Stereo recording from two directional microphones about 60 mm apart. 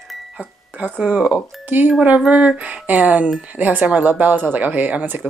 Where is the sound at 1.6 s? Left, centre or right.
Right.